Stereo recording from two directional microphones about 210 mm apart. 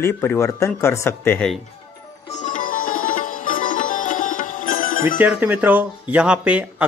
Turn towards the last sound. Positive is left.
turn(degrees=-5)  # may be behind; listen again after turning